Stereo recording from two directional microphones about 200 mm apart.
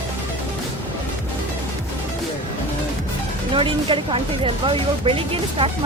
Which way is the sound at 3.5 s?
25° right (ahead or behind).